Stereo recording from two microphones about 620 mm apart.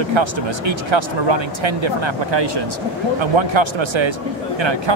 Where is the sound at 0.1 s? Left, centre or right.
Right.